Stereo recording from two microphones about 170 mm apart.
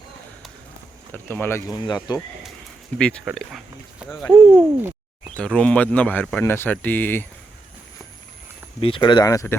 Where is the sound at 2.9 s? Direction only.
Centre (ahead or behind).